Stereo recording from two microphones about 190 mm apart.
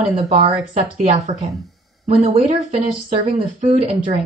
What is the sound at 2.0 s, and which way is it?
Speech, 35° right (ahead or behind).